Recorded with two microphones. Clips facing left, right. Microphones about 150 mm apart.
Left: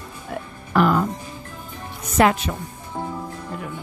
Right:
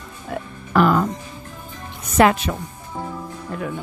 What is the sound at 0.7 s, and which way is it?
Speech, 90° right.